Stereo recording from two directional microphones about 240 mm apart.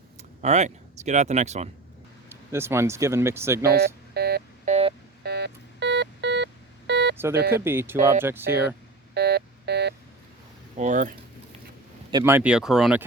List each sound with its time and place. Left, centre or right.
0.4 s speech: right
2.3 s speech: centre
3.6 s telephone dialing: right
4.7 s telephone dialing: right
5.2 s telephone dialing: right
7.5 s speech: centre
9.1 s telephone dialing: right
10.8 s speech: right
12.1 s speech: centre